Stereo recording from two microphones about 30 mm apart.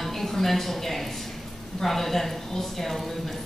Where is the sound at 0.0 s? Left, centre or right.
Centre.